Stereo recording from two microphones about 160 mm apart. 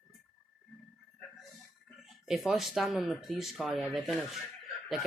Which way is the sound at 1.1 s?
Centre (ahead or behind).